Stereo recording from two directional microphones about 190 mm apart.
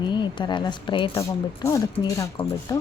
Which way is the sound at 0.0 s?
25° left (ahead or behind).